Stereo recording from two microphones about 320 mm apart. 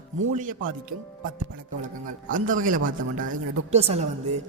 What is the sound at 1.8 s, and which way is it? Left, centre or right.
Speech, right.